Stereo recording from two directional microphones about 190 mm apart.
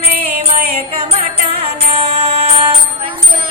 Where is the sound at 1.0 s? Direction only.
30° right (ahead or behind).